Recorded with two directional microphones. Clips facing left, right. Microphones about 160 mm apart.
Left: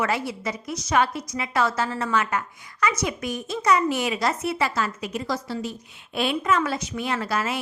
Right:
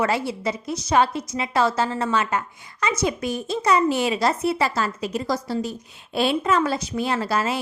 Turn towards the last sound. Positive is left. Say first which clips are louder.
# right 3 dB
turn(degrees=-30)  # may be behind; listen again after turning